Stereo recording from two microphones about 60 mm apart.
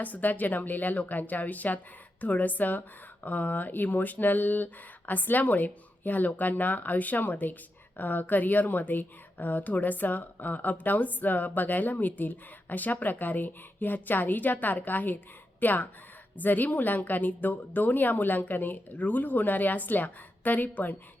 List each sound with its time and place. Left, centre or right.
0.0 s a woman's voice: left